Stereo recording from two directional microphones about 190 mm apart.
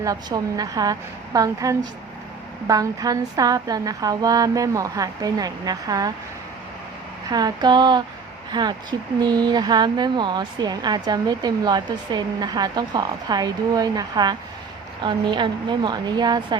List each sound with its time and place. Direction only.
0.0 s speech: 20° right (ahead or behind)
7.3 s speech: 20° right (ahead or behind)